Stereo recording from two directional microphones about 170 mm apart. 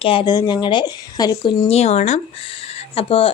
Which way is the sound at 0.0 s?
30° left (ahead or behind).